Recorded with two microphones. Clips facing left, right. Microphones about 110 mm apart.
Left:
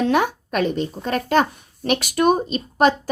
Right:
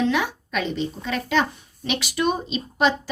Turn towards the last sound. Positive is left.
turn(degrees=45)  # may be behind; listen again after turning